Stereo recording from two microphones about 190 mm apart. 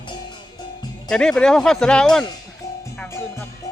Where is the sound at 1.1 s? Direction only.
5° left (ahead or behind).